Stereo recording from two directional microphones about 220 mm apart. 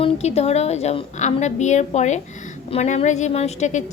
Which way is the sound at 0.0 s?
30° left (ahead or behind).